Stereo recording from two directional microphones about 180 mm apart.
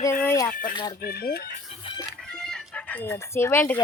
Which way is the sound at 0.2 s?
15° left (ahead or behind).